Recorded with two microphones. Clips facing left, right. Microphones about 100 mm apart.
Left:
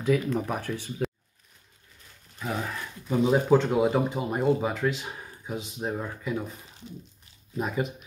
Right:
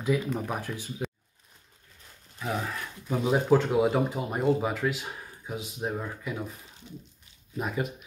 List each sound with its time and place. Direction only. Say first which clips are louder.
0.3 s speech: left 3 dB; 5° right (ahead or behind)
2.3 s a sound: even; centre (ahead or behind)
3.1 s speech: left 2 dB; centre (ahead or behind)
7.5 s speech: left 2 dB; centre (ahead or behind)